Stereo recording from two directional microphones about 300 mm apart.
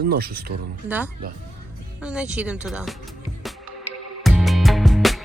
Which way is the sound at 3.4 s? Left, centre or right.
Centre.